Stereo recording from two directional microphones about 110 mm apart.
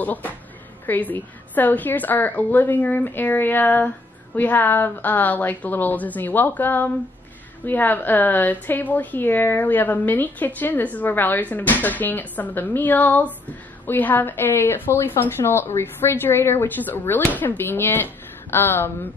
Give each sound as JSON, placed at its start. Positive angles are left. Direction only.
{"t": 0.0, "sound": "a woman's voice", "side_deg": 15}